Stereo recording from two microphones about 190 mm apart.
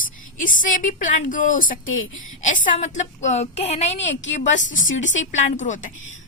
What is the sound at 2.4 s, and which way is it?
A woman's voice, 40° left (ahead or behind).